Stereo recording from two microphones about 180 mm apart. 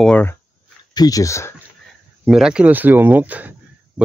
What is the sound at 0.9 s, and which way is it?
Speech, 20° left (ahead or behind).